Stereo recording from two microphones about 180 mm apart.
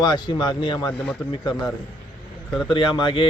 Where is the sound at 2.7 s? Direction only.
25° left (ahead or behind).